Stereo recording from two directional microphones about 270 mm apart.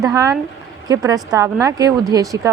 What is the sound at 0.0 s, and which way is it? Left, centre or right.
A woman's voice, centre.